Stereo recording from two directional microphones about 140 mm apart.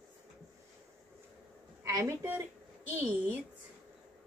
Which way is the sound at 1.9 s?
20° right (ahead or behind).